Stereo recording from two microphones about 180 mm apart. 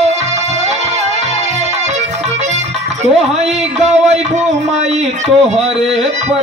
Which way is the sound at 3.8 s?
40° right (ahead or behind).